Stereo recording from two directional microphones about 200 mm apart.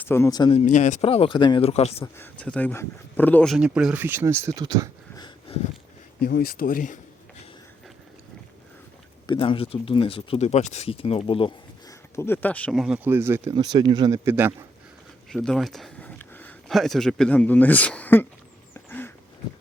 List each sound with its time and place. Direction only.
0.0 s speech: 10° left (ahead or behind)
0.6 s speech: 35° left (ahead or behind)
2.1 s speech: 10° left (ahead or behind); by 4.9 s 20° right (ahead or behind)
5.1 s a sound: 20° left (ahead or behind)
6.2 s speech: 45° left (ahead or behind)
9.2 s speech: 25° left (ahead or behind)
12.1 s speech: 10° left (ahead or behind); by 14.5 s 10° right (ahead or behind)
15.3 s speech: centre (ahead or behind)
18.7 s a sound: 10° left (ahead or behind)